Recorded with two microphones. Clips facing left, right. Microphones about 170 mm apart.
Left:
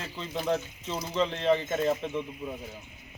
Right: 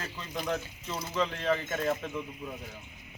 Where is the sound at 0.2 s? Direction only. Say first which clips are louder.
Left 5 dB; 25° left (ahead or behind).